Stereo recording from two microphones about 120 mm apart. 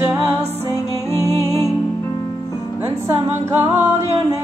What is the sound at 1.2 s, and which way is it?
Music, 30° right (ahead or behind).